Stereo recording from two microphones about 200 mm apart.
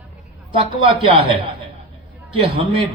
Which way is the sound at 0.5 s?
25° right (ahead or behind).